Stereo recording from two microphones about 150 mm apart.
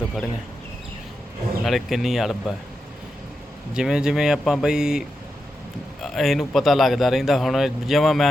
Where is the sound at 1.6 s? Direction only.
Centre (ahead or behind).